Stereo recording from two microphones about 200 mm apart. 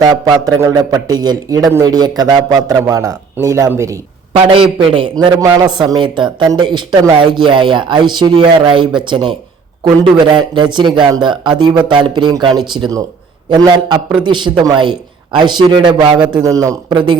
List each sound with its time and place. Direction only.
0.4 s a man's voice: 15° right (ahead or behind)
4.4 s speech: 25° right (ahead or behind)